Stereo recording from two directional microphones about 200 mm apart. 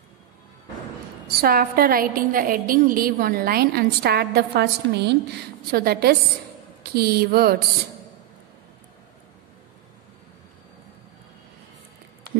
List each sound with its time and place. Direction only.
1.4 s a woman's voice: 50° right (ahead or behind)